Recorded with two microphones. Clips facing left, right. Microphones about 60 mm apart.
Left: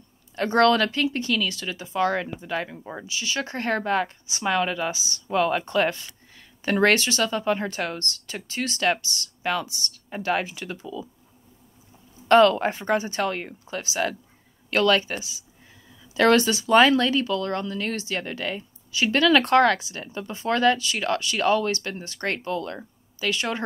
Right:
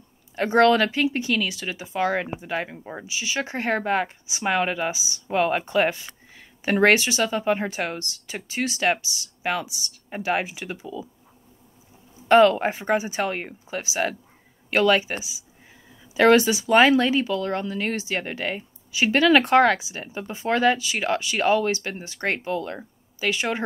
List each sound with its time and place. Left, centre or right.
0.4 s speech: centre
12.3 s speech: centre